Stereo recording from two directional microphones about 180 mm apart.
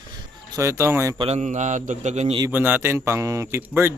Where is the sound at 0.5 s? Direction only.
15° right (ahead or behind).